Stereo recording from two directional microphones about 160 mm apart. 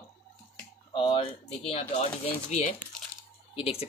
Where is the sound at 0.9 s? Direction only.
35° left (ahead or behind).